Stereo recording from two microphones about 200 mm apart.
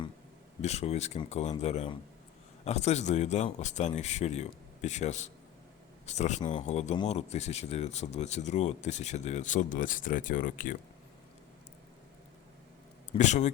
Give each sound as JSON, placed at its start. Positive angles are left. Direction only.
{"t": 0.6, "sound": "speech", "side_deg": 35}
{"t": 13.1, "sound": "speech", "side_deg": 35}